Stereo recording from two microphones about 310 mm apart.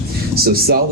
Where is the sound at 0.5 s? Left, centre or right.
Right.